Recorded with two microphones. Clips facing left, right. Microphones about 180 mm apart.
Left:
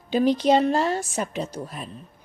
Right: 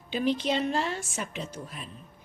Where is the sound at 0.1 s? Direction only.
40° left (ahead or behind).